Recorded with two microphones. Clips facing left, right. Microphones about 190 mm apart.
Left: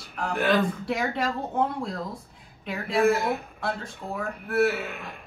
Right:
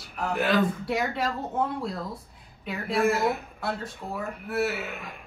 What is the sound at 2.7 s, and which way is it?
A woman's voice, centre (ahead or behind).